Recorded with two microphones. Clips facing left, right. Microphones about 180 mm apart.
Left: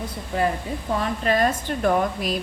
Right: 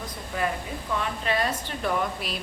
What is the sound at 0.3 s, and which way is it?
Speech, 30° left (ahead or behind).